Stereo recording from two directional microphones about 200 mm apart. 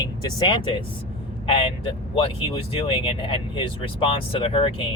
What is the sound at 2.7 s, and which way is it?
Speech, 25° left (ahead or behind).